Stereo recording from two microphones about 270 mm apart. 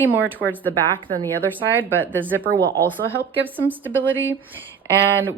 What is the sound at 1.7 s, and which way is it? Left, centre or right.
Speech, centre.